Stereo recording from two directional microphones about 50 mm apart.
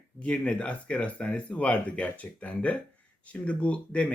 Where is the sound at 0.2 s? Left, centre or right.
Left.